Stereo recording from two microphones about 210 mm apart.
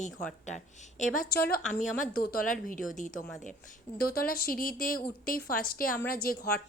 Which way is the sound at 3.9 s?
45° left (ahead or behind).